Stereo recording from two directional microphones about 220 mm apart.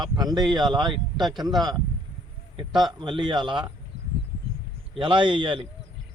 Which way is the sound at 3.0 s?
20° right (ahead or behind).